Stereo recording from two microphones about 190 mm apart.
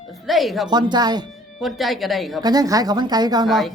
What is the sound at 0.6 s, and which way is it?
Speech, 20° right (ahead or behind).